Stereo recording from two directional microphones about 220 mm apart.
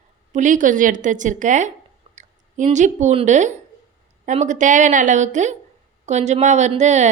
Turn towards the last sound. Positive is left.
turn(degrees=-30)  # may be behind; listen again after turning